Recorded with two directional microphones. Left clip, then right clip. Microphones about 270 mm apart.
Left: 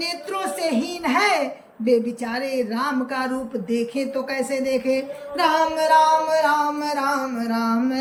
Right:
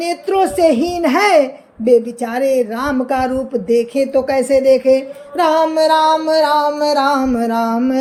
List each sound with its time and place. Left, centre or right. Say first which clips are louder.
0.3 s music: right 15 dB; centre
0.7 s a child's voice: right 10 dB; centre
1.0 s music: right 8 dB; centre
7.0 s a sound: right 8 dB; right